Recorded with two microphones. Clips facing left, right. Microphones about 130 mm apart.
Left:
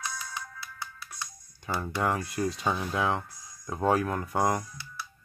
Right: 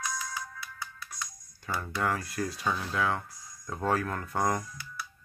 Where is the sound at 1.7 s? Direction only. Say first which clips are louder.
Left 2 dB; 20° left (ahead or behind).